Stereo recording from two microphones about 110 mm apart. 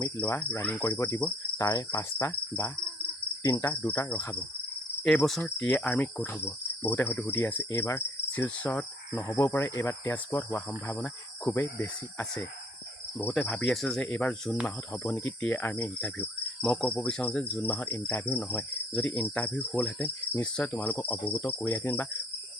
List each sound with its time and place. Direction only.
0.0 s cricket: 15° left (ahead or behind)
0.6 s speech: 15° left (ahead or behind); by 2.0 s 35° left (ahead or behind)
2.0 s speech: 20° left (ahead or behind)
5.0 s cricket: centre (ahead or behind)
9.2 s speech: 25° left (ahead or behind)
12.2 s cricket: 5° left (ahead or behind)